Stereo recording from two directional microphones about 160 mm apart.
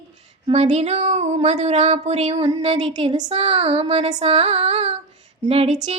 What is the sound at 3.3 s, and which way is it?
Child singing, 40° right (ahead or behind).